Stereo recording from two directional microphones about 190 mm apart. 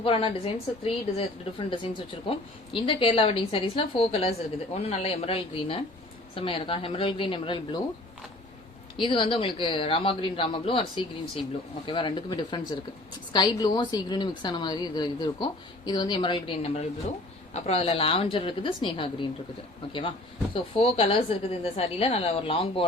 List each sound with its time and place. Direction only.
0.0 s a woman's voice: 30° left (ahead or behind)
9.0 s a woman's voice: 25° left (ahead or behind)